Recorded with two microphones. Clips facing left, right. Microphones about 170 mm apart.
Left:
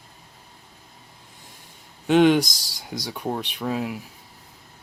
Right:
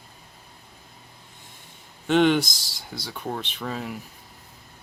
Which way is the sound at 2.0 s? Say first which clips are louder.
Left 3 dB; 10° left (ahead or behind).